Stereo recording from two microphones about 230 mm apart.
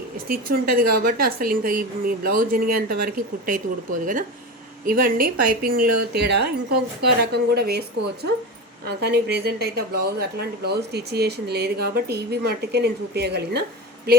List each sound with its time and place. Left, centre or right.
0.3 s a woman's voice: right